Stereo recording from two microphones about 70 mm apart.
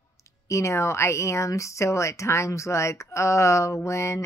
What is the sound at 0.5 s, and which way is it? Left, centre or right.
Speech, left.